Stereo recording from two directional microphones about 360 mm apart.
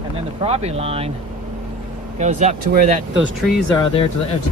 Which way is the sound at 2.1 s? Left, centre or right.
Centre.